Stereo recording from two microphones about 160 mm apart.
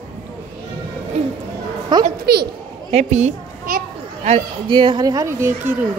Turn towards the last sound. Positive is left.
turn(degrees=-15)  # may be behind; listen again after turning